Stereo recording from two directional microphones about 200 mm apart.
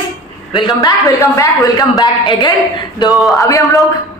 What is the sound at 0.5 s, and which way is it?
A man's voice, 25° left (ahead or behind).